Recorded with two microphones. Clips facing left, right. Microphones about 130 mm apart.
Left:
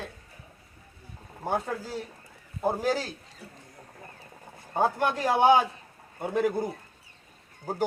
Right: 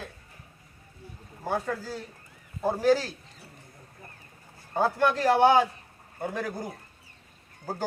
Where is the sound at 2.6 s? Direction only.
15° left (ahead or behind).